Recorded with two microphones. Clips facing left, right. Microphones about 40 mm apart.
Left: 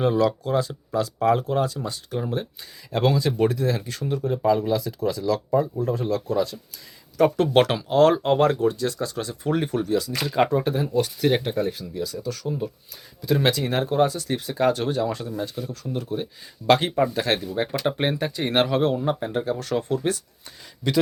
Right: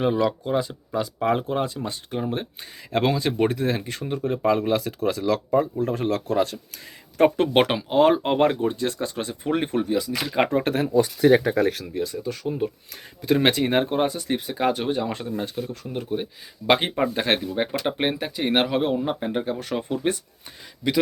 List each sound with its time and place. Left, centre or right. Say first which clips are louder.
0.0 s speech: left 1 dB; centre; by 6.6 s right
7.2 s speech: even; right
10.5 s speech: right 1 dB; right
11.6 s speech: right 4 dB; right
11.9 s speech: right 2 dB; right
15.1 s speech: right 1 dB; right
17.4 s speech: even; centre